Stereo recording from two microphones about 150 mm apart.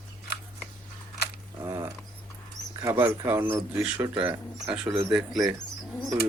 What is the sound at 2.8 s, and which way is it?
Speech, 15° right (ahead or behind).